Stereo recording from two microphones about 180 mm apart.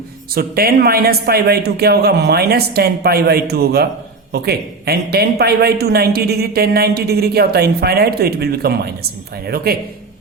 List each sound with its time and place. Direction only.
0.3 s speech: 55° right (ahead or behind)